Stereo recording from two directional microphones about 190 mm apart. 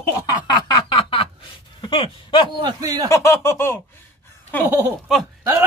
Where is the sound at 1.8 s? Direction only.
25° left (ahead or behind).